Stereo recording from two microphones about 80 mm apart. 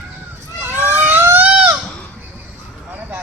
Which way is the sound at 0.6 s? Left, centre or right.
Right.